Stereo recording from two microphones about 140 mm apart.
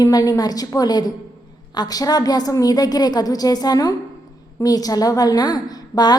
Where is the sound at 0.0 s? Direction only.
25° left (ahead or behind).